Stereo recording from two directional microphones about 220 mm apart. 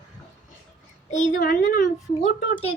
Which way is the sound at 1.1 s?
35° left (ahead or behind).